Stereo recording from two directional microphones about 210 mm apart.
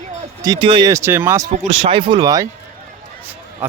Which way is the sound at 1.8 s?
25° right (ahead or behind).